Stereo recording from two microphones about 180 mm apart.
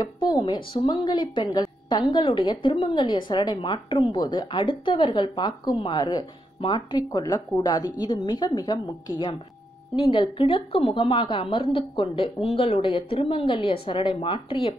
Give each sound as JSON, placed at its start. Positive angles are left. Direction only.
{"t": 0.0, "sound": "speech", "side_deg": 25}